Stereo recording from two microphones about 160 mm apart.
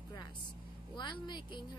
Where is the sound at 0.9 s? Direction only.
30° left (ahead or behind).